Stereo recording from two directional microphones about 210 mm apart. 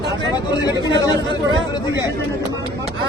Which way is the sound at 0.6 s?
20° left (ahead or behind).